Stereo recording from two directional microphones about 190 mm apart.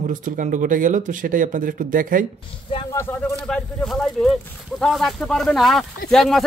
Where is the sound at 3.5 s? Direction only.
5° left (ahead or behind).